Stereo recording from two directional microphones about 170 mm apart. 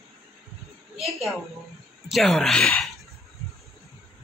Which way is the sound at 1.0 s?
Centre (ahead or behind).